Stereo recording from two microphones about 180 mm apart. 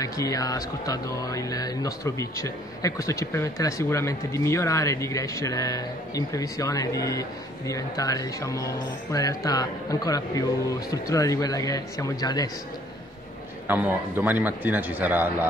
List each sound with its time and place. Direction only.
0.0 s speech: 20° left (ahead or behind)
13.7 s a man's voice: 10° right (ahead or behind)